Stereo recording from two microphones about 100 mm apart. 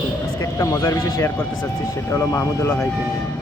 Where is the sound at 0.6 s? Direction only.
35° left (ahead or behind).